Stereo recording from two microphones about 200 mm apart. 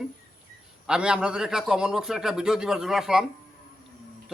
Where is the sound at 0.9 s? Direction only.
5° right (ahead or behind).